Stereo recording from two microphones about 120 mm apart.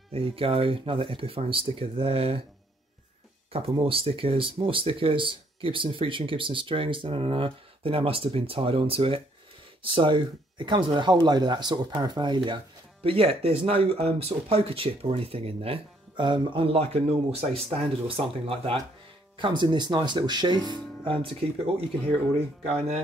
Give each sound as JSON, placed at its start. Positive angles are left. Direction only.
{"t": 0.1, "sound": "speech", "side_deg": -50}
{"t": 3.5, "sound": "speech", "side_deg": -50}
{"t": 13.0, "sound": "speech", "side_deg": -55}
{"t": 16.2, "sound": "speech", "side_deg": -40}
{"t": 22.7, "sound": "speech", "side_deg": -55}